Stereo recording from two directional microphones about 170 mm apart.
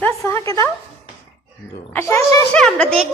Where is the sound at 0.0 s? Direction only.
15° left (ahead or behind).